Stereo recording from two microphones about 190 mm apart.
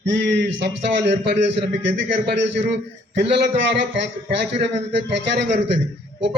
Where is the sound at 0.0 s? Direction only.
65° right (ahead or behind).